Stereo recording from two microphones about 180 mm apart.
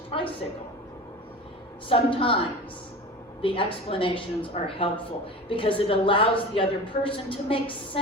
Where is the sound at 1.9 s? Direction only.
30° left (ahead or behind).